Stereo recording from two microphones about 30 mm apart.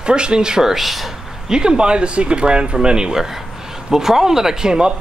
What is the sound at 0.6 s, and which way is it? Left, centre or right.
Speech, centre.